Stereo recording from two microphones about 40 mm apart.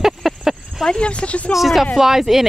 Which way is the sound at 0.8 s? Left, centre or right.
Left.